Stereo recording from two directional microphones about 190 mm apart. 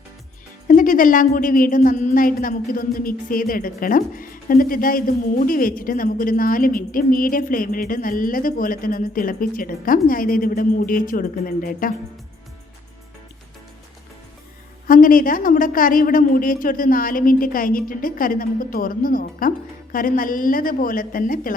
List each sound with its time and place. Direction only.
0.7 s a woman's voice: 45° left (ahead or behind)
14.8 s a woman's voice: 50° left (ahead or behind)